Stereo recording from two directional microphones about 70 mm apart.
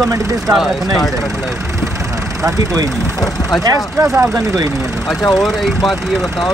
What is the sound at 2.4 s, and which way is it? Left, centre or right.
Speech, right.